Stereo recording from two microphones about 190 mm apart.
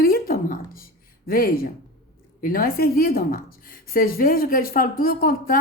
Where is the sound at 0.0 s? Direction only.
50° left (ahead or behind).